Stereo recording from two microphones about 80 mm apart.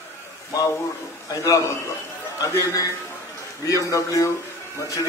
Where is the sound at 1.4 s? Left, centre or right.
Left.